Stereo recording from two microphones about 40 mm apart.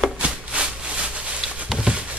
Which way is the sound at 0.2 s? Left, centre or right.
Right.